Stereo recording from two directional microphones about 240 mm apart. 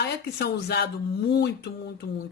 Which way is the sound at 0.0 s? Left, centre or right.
Left.